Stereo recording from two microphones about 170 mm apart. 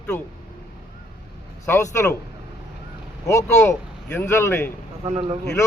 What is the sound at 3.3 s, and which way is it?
Speech, 20° left (ahead or behind).